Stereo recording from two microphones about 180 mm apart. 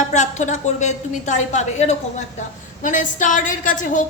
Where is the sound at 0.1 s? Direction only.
40° left (ahead or behind).